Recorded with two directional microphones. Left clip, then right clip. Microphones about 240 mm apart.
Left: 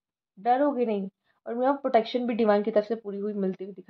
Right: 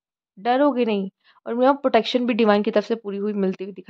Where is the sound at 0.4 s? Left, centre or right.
Right.